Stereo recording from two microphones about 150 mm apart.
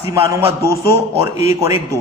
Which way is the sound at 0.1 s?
20° right (ahead or behind).